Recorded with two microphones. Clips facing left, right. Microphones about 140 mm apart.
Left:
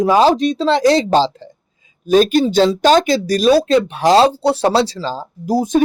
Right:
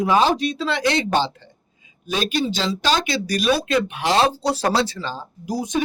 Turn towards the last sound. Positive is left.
turn(degrees=50)  # may be behind; listen again after turning